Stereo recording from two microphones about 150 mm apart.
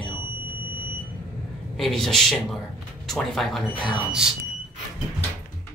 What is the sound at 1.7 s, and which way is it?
Speech, centre (ahead or behind).